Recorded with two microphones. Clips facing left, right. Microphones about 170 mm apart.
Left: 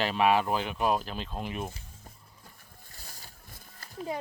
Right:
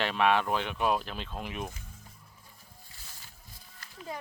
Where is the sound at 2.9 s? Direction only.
40° left (ahead or behind).